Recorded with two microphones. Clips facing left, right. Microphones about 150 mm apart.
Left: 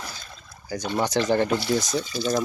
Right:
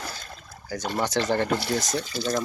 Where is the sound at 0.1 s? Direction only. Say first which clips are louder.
Right 2 dB; 55° right (ahead or behind).